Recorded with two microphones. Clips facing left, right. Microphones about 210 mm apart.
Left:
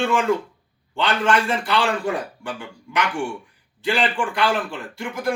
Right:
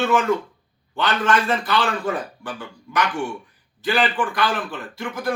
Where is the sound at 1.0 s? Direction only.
10° left (ahead or behind).